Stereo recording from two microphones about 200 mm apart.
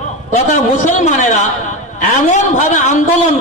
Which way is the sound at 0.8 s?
40° left (ahead or behind).